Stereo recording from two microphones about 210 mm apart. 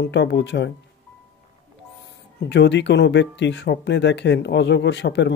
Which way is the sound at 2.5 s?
55° left (ahead or behind).